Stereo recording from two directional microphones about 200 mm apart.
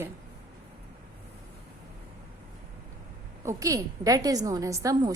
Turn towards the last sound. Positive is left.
turn(degrees=-20)  # may be behind; listen again after turning